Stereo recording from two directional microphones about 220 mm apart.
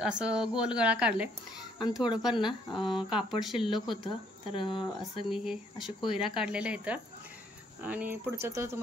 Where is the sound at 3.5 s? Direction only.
20° left (ahead or behind).